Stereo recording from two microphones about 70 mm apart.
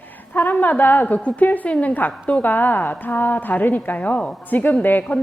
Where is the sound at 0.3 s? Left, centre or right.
Left.